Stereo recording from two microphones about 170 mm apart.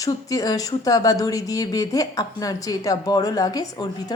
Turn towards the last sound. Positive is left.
turn(degrees=25)  # may be behind; listen again after turning